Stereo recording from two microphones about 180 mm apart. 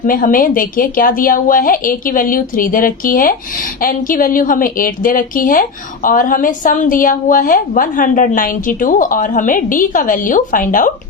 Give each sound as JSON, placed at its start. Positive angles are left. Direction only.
{"t": 0.0, "sound": "a woman's voice", "side_deg": 50}